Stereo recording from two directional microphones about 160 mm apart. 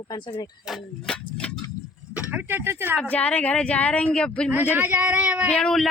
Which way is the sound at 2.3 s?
10° right (ahead or behind).